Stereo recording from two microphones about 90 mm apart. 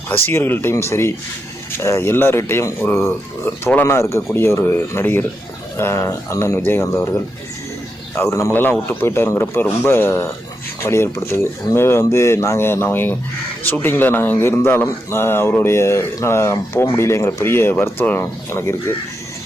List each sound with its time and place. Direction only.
0.1 s speech: 25° left (ahead or behind)
8.1 s speech: 30° left (ahead or behind)